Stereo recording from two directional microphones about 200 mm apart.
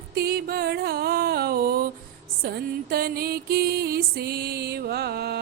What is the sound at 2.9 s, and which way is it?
Music, 50° right (ahead or behind).